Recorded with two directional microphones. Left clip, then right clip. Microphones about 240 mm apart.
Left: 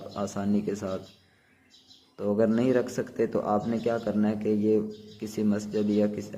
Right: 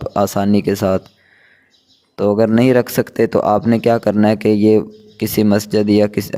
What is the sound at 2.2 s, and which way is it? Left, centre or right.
Speech, right.